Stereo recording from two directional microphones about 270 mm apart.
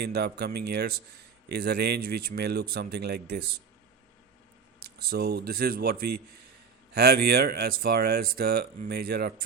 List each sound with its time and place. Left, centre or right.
0.0 s speech: right
4.9 s speech: right